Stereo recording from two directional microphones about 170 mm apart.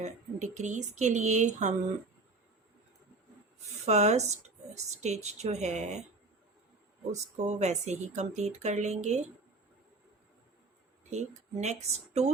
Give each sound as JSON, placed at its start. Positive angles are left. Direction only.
{"t": 0.0, "sound": "speech", "side_deg": -45}
{"t": 3.8, "sound": "speech", "side_deg": -40}
{"t": 7.1, "sound": "speech", "side_deg": -40}
{"t": 11.1, "sound": "speech", "side_deg": -40}